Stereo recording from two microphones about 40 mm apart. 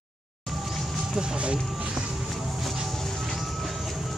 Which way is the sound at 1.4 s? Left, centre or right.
Right.